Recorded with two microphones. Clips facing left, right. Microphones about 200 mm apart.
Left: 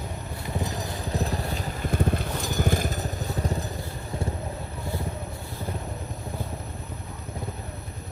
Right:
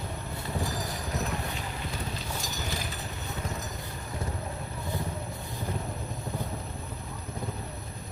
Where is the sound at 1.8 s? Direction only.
55° left (ahead or behind); by 3.6 s 35° left (ahead or behind).